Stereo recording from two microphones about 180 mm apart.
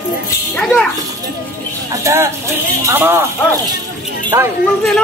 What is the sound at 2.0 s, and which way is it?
A man's voice, 15° right (ahead or behind).